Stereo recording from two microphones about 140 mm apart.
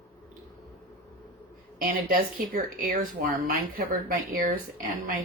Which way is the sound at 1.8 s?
85° right.